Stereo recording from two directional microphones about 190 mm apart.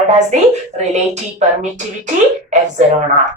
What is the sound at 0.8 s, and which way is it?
Speech, 40° right (ahead or behind).